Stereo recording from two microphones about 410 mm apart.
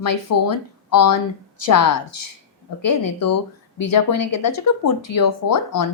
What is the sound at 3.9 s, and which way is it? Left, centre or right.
Speech, left.